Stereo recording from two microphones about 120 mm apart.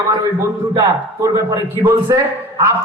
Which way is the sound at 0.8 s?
30° right (ahead or behind).